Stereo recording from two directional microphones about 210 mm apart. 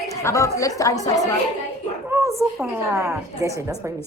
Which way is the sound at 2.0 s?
10° right (ahead or behind).